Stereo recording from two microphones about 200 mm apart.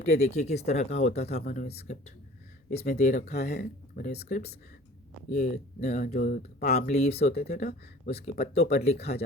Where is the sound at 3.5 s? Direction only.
50° left (ahead or behind).